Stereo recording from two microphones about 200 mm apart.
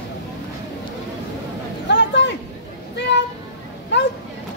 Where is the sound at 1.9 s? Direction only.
60° left (ahead or behind).